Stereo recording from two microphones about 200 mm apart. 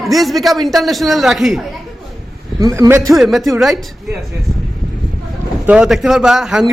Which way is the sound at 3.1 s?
Centre (ahead or behind).